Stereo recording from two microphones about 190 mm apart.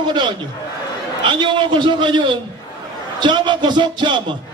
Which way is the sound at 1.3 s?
25° right (ahead or behind).